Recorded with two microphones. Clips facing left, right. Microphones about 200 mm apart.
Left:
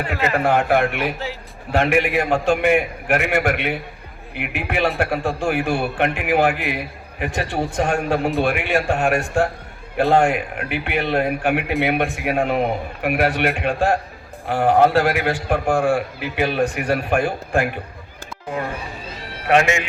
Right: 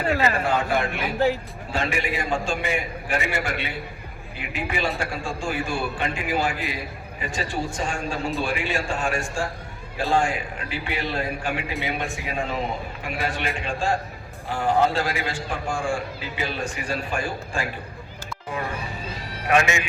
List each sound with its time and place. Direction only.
0.4 s a man's voice: 60° left (ahead or behind)